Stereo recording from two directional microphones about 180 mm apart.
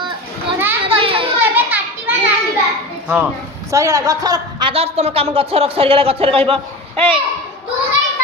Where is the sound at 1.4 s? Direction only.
10° right (ahead or behind).